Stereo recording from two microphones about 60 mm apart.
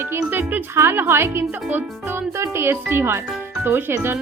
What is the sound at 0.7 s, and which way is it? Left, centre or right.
A woman's voice, right.